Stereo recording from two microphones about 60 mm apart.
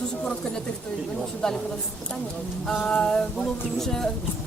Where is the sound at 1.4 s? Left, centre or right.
Centre.